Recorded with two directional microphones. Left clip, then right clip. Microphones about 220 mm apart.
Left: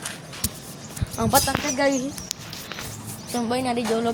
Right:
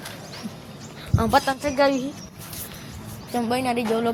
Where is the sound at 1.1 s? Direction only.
Centre (ahead or behind).